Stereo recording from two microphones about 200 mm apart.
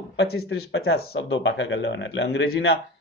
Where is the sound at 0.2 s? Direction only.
55° left (ahead or behind).